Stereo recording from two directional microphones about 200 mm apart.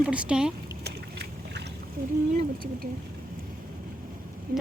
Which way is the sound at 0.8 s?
55° right (ahead or behind).